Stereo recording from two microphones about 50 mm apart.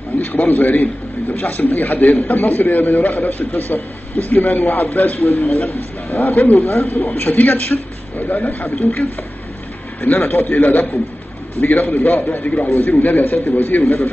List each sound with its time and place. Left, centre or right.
0.2 s a man's voice: left
10.0 s a man's voice: left
12.6 s a man's voice: left
12.9 s a man's voice: left